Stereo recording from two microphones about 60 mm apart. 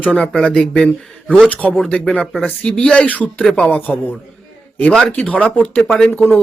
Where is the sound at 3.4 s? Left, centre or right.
Centre.